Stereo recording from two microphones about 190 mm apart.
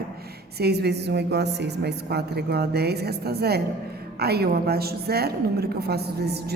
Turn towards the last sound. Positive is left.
turn(degrees=-55)  # may be behind; listen again after turning